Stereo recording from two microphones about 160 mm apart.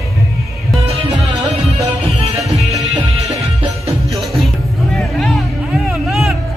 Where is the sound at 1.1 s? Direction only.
20° right (ahead or behind).